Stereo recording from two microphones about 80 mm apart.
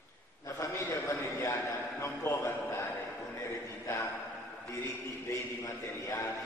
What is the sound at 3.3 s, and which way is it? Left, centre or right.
Music, left.